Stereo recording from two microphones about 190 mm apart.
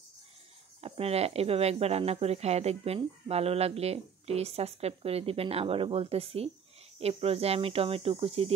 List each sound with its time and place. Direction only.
0.7 s speech: 30° right (ahead or behind)